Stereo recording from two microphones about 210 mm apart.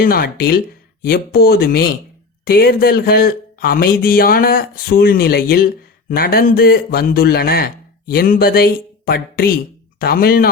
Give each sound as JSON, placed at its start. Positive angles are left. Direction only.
{"t": 0.0, "sound": "a man's voice", "side_deg": 45}